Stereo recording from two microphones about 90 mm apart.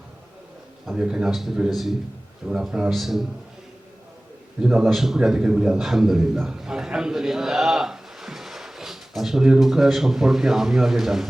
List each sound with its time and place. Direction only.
0.9 s a man's voice: 10° right (ahead or behind)
4.6 s a man's voice: 5° right (ahead or behind)